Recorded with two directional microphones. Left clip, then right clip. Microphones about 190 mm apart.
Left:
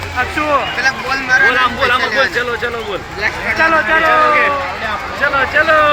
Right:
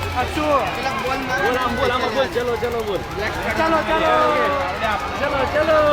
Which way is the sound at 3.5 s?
10° left (ahead or behind).